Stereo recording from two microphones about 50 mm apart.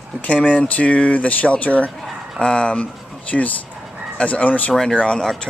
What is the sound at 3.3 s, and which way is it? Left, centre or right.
Mantra, centre.